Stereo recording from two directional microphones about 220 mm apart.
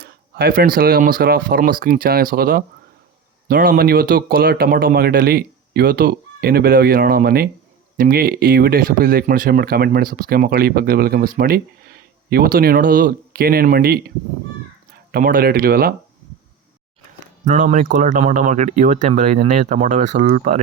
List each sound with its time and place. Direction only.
0.0 s speech: 45° right (ahead or behind)
15.1 s speech: 40° right (ahead or behind)
17.4 s speech: 35° right (ahead or behind)